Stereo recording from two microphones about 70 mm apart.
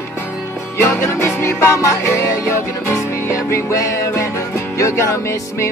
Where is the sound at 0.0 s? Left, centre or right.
Left.